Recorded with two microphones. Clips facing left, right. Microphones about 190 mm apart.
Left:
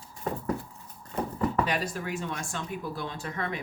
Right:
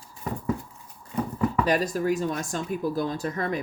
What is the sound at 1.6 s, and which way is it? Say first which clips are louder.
Speech: right 7 dB; 40° right (ahead or behind).